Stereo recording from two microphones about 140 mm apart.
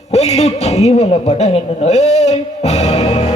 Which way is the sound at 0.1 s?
50° left (ahead or behind).